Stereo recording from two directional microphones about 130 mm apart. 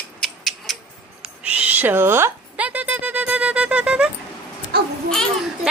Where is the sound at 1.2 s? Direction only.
10° right (ahead or behind).